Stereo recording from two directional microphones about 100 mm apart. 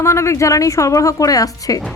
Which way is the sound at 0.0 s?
30° left (ahead or behind).